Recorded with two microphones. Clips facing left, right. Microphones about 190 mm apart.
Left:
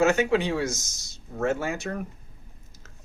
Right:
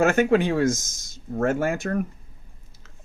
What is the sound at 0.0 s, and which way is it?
Speech, 50° right (ahead or behind).